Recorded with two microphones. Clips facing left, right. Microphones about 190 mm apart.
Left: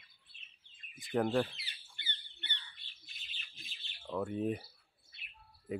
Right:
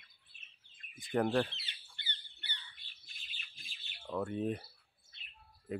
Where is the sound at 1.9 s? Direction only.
20° left (ahead or behind).